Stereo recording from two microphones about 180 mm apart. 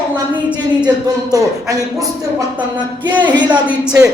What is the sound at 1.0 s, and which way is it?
Speech, 20° right (ahead or behind).